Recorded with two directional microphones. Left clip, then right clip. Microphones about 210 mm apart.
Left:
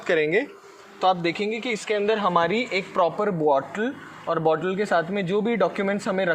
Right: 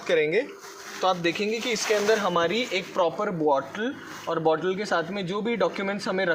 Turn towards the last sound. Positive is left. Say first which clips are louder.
# left 2 dB
turn(degrees=40)  # may be behind; listen again after turning